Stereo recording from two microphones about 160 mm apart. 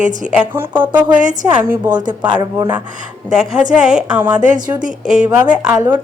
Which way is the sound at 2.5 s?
15° right (ahead or behind).